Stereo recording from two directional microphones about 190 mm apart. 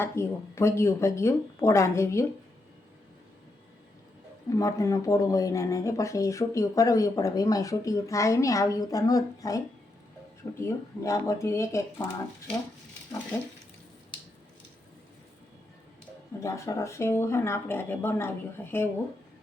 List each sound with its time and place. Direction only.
0.0 s speech: 15° left (ahead or behind)
4.4 s speech: 15° left (ahead or behind)
10.6 s speech: 15° left (ahead or behind)
16.4 s speech: 15° left (ahead or behind)